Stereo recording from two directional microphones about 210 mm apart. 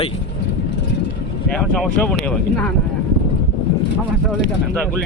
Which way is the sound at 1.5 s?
5° left (ahead or behind).